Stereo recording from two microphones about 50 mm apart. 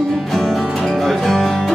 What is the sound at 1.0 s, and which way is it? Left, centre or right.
Music, centre.